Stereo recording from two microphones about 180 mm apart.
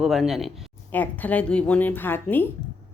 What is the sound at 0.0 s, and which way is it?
Speech, centre (ahead or behind).